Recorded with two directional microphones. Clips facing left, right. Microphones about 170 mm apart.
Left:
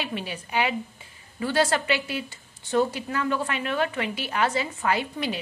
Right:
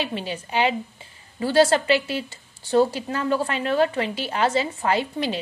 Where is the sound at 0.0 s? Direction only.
30° right (ahead or behind).